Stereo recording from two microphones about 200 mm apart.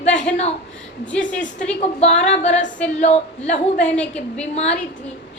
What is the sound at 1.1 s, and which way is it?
Speech, 5° left (ahead or behind).